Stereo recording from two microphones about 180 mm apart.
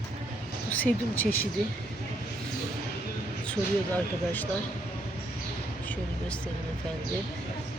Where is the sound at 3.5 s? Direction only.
10° left (ahead or behind).